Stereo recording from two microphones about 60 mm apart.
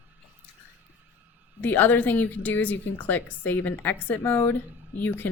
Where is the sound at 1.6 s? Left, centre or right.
Left.